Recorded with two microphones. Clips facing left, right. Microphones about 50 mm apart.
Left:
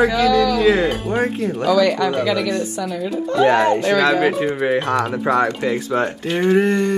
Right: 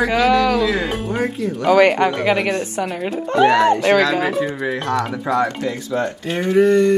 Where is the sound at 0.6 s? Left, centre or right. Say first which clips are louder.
Left 4 dB; left.